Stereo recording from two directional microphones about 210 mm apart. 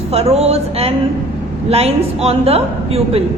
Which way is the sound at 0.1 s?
30° right (ahead or behind).